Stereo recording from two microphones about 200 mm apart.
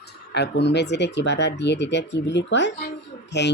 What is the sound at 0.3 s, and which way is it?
Speech, 60° left (ahead or behind).